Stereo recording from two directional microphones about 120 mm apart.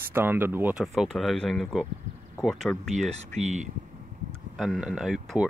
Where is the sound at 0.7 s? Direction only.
5° right (ahead or behind).